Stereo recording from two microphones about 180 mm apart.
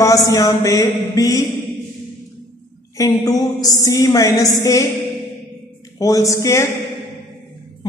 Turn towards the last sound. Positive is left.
turn(degrees=15)  # may be behind; listen again after turning